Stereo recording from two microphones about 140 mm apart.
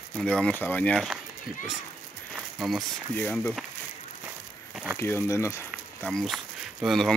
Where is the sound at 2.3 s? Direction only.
Centre (ahead or behind).